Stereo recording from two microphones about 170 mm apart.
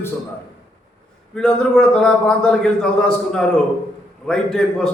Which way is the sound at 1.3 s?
5° left (ahead or behind).